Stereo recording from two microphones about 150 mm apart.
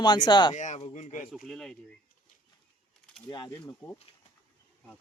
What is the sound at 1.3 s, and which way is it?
Speech, centre (ahead or behind).